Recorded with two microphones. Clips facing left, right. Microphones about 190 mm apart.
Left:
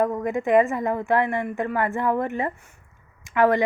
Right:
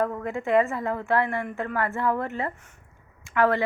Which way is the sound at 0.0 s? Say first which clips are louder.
Left 4 dB; 15° left (ahead or behind).